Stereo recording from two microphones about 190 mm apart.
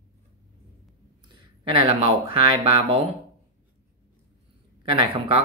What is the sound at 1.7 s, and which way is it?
Speech, 25° right (ahead or behind).